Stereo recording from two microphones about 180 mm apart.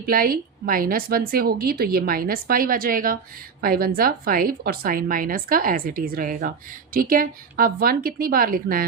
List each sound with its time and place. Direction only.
0.0 s a woman's voice: 55° right (ahead or behind)